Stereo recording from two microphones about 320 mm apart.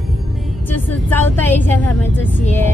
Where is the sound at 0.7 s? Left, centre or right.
Centre.